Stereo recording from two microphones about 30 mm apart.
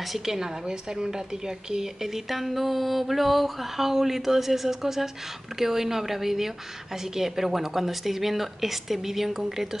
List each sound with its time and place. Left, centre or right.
0.0 s speech: centre
0.7 s speech: right